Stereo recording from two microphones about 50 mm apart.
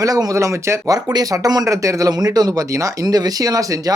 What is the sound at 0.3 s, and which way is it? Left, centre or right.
Speech, right.